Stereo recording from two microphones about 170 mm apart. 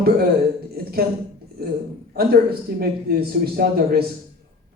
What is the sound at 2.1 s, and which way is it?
Speech, 65° right (ahead or behind).